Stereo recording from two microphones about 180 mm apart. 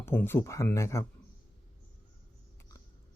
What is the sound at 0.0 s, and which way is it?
Speech, 10° left (ahead or behind).